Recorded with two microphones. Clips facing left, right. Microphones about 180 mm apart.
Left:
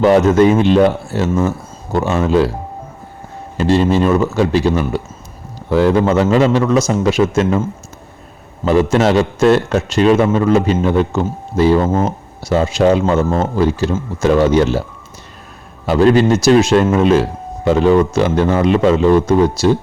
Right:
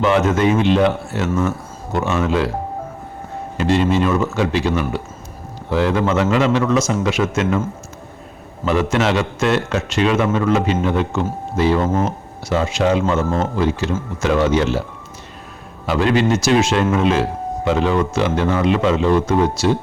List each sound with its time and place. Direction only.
0.0 s a man's voice: 35° left (ahead or behind)
3.6 s a man's voice: 35° left (ahead or behind)
8.6 s a man's voice: 35° left (ahead or behind)
15.9 s a man's voice: 40° left (ahead or behind)